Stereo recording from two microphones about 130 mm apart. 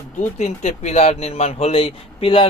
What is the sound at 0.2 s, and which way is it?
Speech, 65° left (ahead or behind).